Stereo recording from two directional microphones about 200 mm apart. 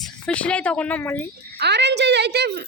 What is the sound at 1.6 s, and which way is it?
A woman's voice, 55° right (ahead or behind).